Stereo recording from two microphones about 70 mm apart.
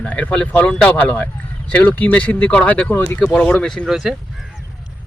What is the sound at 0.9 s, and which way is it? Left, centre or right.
Speech, left.